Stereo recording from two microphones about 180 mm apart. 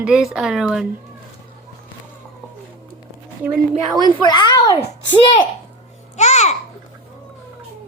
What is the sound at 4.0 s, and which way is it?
Speech, 25° left (ahead or behind).